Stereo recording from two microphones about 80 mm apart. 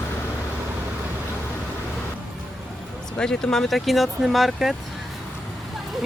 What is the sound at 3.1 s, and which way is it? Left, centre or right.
Speech, centre.